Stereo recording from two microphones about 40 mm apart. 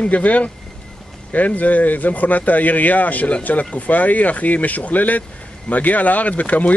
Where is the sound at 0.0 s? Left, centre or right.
Left.